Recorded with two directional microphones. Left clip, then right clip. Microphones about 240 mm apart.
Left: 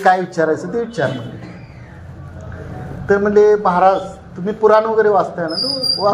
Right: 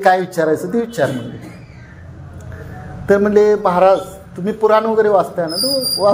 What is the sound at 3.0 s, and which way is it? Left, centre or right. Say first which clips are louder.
A man's voice: even; right.